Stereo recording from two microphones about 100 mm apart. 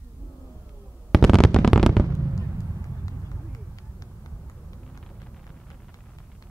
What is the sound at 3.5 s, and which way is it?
Run, 35° left (ahead or behind).